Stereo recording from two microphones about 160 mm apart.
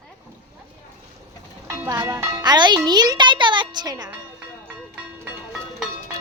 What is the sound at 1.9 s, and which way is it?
A child's voice, 20° right (ahead or behind).